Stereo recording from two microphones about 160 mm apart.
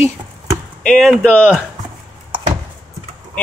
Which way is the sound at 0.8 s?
5° left (ahead or behind).